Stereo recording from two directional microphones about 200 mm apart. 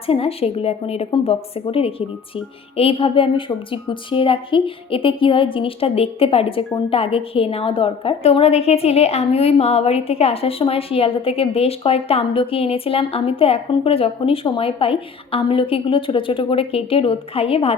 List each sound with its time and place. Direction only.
0.1 s a woman's voice: 30° left (ahead or behind)